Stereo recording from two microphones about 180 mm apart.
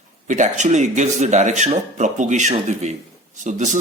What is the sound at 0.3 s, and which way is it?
Speech, 40° right (ahead or behind).